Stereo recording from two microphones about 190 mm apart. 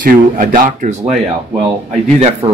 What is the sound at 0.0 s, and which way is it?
Speech, 45° right (ahead or behind).